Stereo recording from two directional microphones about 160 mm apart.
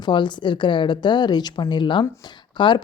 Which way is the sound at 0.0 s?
30° left (ahead or behind).